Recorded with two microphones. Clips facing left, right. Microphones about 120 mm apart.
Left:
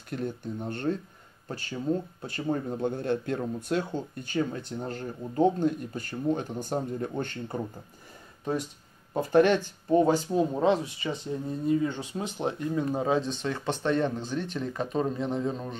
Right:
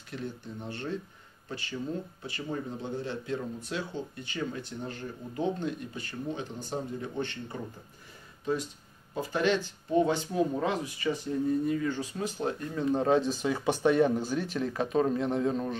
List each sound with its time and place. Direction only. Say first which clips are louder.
0.1 s speech: left 5 dB; 50° left (ahead or behind)
9.1 s speech: left 6 dB; 55° left (ahead or behind); by 12.8 s 20° left (ahead or behind)
12.9 s speech: right 1 dB; 5° left (ahead or behind)